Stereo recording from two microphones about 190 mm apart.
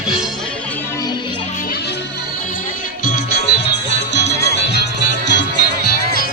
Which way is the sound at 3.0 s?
60° left (ahead or behind).